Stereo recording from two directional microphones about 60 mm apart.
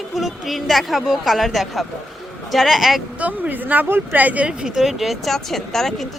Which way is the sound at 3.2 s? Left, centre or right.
Right.